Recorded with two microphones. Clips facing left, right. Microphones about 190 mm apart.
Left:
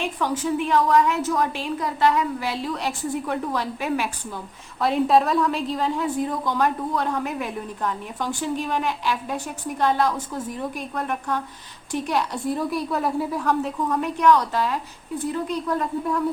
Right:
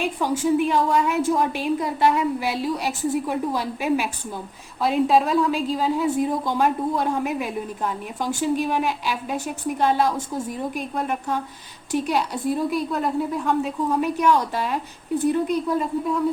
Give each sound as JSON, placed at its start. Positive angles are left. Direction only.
{"t": 0.2, "sound": "a woman's voice", "side_deg": -10}
{"t": 1.2, "sound": "a woman's voice", "side_deg": -25}
{"t": 1.5, "sound": "a woman's voice", "side_deg": -15}
{"t": 4.8, "sound": "a woman's voice", "side_deg": 0}
{"t": 13.9, "sound": "a woman's voice", "side_deg": -10}
{"t": 15.8, "sound": "a woman's voice", "side_deg": 0}